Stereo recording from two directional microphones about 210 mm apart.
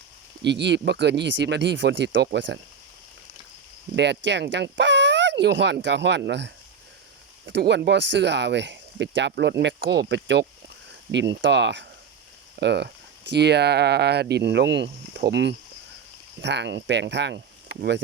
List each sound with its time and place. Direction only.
0.4 s speech: 55° right (ahead or behind)
3.9 s speech: 55° right (ahead or behind)